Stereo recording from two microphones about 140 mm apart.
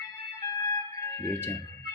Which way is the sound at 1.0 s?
20° left (ahead or behind).